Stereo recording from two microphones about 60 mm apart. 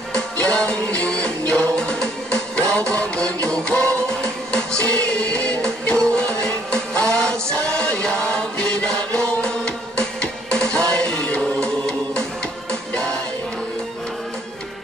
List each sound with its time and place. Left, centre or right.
0.1 s music: centre